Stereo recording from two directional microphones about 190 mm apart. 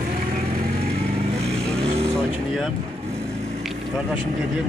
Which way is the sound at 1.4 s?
35° right (ahead or behind).